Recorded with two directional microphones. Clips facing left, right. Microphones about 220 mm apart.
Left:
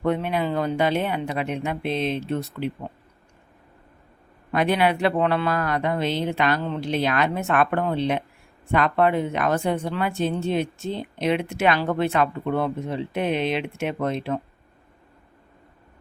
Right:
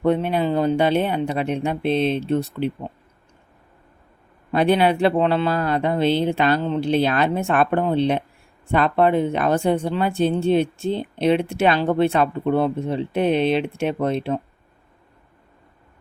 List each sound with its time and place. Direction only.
0.0 s speech: 30° right (ahead or behind)
4.5 s speech: 30° right (ahead or behind)